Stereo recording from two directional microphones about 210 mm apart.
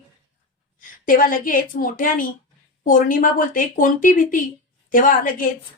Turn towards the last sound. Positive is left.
turn(degrees=40)  # may be behind; listen again after turning